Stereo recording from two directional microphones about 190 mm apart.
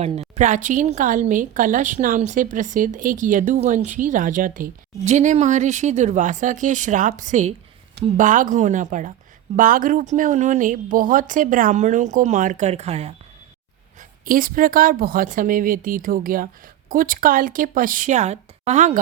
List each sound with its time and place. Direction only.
0.0 s speech: 35° right (ahead or behind)
14.3 s speech: 45° right (ahead or behind)